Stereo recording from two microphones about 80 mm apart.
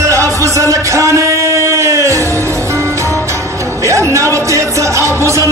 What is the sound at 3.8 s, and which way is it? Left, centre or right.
Music, right.